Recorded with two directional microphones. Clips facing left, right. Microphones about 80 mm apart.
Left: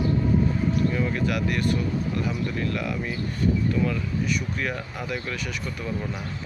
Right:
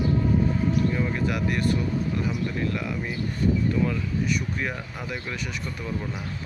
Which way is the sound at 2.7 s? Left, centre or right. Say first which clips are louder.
Left 1 dB; right.